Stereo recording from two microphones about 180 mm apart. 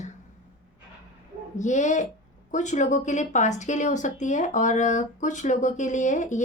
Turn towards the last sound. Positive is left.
turn(degrees=45)  # may be behind; listen again after turning